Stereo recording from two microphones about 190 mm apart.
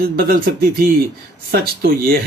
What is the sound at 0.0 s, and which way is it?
Speech, 50° right (ahead or behind).